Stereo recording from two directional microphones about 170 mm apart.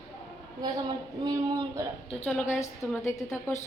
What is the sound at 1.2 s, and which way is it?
Speech, 20° right (ahead or behind).